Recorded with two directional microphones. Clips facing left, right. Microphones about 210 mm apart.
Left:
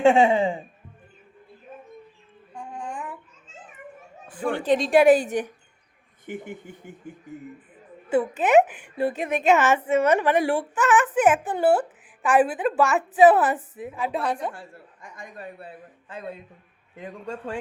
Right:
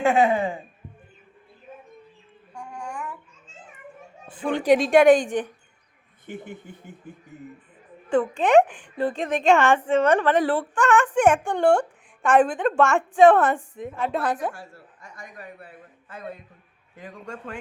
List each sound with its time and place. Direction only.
0.0 s speech: 25° left (ahead or behind)
2.6 s a sound: 20° left (ahead or behind)
4.3 s a woman's voice: 20° right (ahead or behind)
4.8 s a woman's voice: centre (ahead or behind)
8.1 s a woman's voice: 5° left (ahead or behind)
14.5 s a woman's voice: 55° left (ahead or behind)
15.4 s a man's voice: 30° left (ahead or behind)
17.0 s a man's voice: 30° left (ahead or behind)